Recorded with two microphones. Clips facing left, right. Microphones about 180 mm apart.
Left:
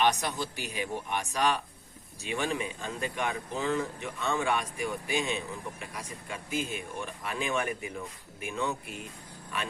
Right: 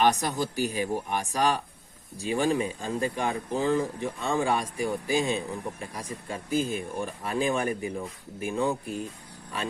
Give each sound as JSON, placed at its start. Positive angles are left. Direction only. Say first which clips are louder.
{"t": 0.0, "sound": "speech", "louder": "right 4 dB", "side_deg": -40}